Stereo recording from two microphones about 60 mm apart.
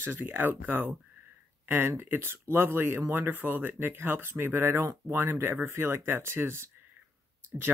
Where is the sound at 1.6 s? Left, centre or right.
Right.